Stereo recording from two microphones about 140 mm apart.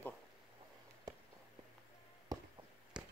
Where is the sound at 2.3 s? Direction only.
25° right (ahead or behind).